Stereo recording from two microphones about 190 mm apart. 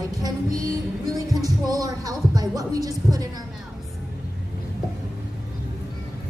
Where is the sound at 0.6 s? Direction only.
20° right (ahead or behind).